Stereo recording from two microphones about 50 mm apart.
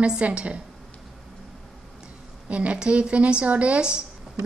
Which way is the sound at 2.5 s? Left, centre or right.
Right.